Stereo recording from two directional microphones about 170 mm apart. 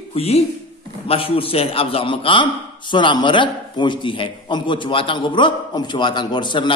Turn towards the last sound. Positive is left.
turn(degrees=30)  # may be behind; listen again after turning